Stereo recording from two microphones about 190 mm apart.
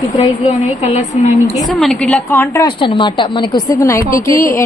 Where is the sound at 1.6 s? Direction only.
Centre (ahead or behind).